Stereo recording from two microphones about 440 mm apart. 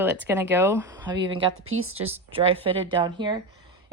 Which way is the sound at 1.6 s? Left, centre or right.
Right.